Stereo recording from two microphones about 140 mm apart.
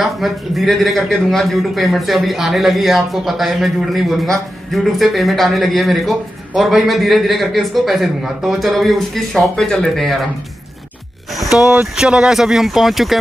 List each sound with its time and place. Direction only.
0.0 s a man's voice: centre (ahead or behind)
11.3 s a man's voice: 5° right (ahead or behind)
11.6 s speech: 15° right (ahead or behind)
12.0 s a man's voice: 5° right (ahead or behind)